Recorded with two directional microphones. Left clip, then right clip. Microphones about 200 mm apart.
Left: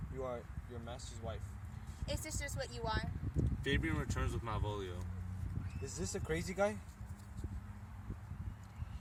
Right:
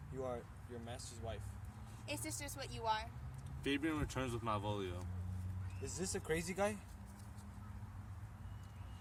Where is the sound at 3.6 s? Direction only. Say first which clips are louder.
Even; 45° right (ahead or behind).